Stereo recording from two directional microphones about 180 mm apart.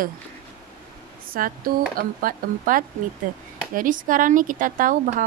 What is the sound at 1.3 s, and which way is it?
Speech, 55° right (ahead or behind).